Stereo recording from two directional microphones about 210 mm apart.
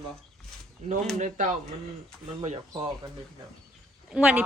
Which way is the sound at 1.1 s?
40° right (ahead or behind).